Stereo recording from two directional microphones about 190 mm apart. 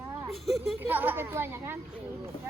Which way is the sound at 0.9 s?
10° right (ahead or behind).